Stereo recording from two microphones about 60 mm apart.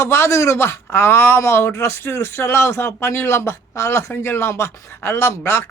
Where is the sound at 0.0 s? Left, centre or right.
Left.